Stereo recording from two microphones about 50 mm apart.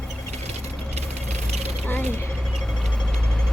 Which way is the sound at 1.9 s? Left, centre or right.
Left.